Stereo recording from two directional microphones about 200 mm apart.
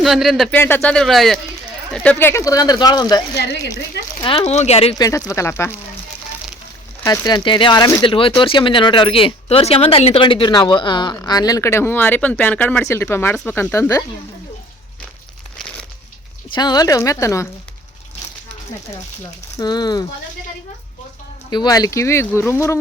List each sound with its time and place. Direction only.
0.0 s speech: centre (ahead or behind); by 3.2 s 20° left (ahead or behind)
3.3 s a woman's voice: 60° left (ahead or behind)
4.2 s speech: 20° left (ahead or behind)
4.4 s speech: 35° left (ahead or behind)
5.0 s speech: 15° left (ahead or behind)
7.0 s speech: 20° left (ahead or behind)
16.6 s speech: 20° left (ahead or behind)
19.2 s speech: 20° left (ahead or behind)
21.5 s speech: 20° left (ahead or behind)